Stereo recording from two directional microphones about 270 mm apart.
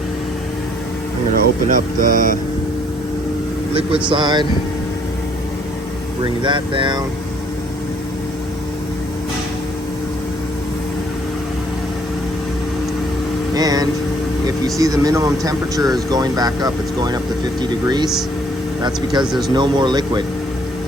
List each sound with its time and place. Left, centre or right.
1.6 s speech: right
4.1 s speech: centre
6.4 s speech: centre
13.5 s speech: centre
19.2 s speech: centre
19.5 s speech: centre